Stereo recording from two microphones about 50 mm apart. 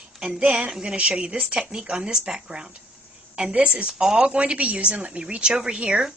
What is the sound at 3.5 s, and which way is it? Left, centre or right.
Speech, right.